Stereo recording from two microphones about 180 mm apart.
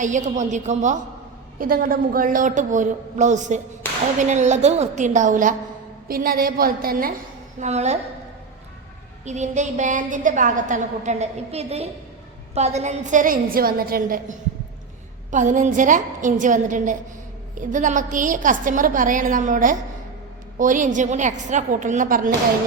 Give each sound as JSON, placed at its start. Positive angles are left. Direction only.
{"t": 0.0, "sound": "a woman's voice", "side_deg": -45}
{"t": 1.5, "sound": "a woman's voice", "side_deg": -50}
{"t": 7.6, "sound": "a woman's voice", "side_deg": -40}
{"t": 9.2, "sound": "a woman's voice", "side_deg": -40}